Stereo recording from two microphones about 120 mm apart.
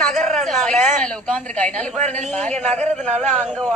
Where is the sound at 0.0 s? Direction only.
5° left (ahead or behind).